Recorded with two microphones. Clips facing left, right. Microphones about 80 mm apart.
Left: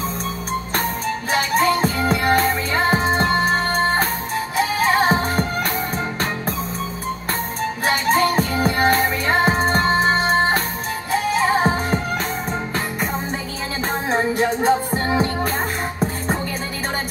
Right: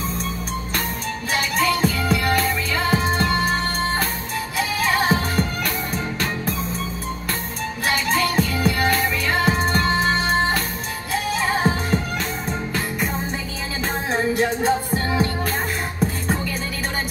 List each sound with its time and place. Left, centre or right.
1.3 s music: left
7.8 s music: left
14.1 s music: left